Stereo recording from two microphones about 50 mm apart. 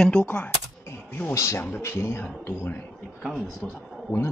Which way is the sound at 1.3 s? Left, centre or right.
Left.